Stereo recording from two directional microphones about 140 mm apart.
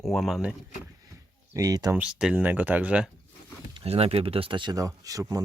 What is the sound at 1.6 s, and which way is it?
Speech, 25° right (ahead or behind).